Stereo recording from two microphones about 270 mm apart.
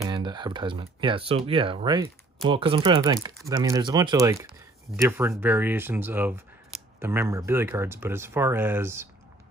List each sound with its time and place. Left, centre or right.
0.1 s speech: centre